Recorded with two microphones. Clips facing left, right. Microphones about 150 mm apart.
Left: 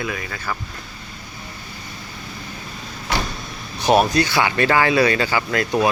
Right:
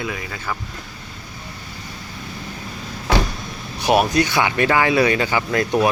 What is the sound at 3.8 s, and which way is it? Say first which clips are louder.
Speech: left 1 dB; 10° right (ahead or behind).